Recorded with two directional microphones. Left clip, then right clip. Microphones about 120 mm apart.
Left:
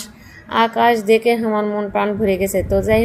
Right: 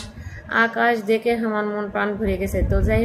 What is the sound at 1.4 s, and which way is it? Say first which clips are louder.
A woman's voice: left 4 dB; 30° left (ahead or behind).